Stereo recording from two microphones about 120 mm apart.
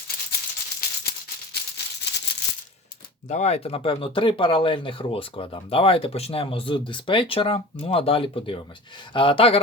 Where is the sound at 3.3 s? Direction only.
65° left (ahead or behind).